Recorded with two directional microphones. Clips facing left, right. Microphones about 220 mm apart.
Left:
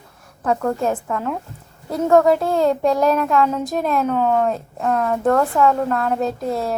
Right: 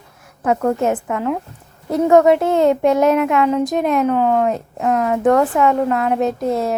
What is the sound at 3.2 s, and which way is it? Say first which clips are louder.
A woman's voice: right 3 dB; 10° right (ahead or behind).